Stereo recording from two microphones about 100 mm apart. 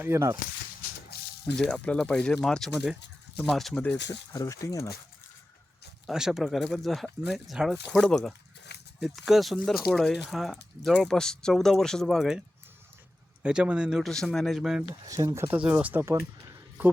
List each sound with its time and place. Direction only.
0.0 s speech: 25° right (ahead or behind)
1.5 s speech: 10° left (ahead or behind)
4.3 s speech: 35° left (ahead or behind)
6.1 s speech: 5° right (ahead or behind)
13.4 s speech: 10° right (ahead or behind)
14.0 s speech: 5° left (ahead or behind)
15.0 s speech: 35° right (ahead or behind)
15.4 s a man's voice: 15° right (ahead or behind)